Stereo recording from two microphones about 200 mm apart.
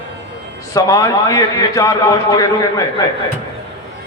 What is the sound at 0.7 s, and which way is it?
A man's voice, 15° left (ahead or behind).